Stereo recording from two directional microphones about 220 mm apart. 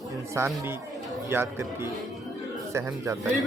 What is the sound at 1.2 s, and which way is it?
Speech, 10° right (ahead or behind).